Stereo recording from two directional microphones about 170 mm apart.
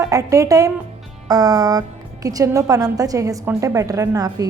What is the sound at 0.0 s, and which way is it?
A woman's voice, 20° right (ahead or behind).